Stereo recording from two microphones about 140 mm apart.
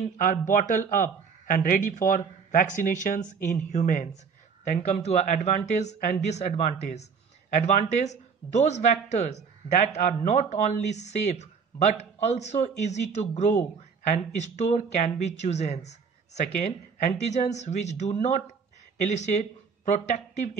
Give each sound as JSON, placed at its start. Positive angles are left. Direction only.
{"t": 0.0, "sound": "a man's voice", "side_deg": 70}
{"t": 4.6, "sound": "speech", "side_deg": 55}